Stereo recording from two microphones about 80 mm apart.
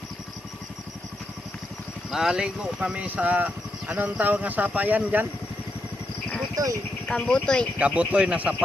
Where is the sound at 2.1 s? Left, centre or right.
Centre.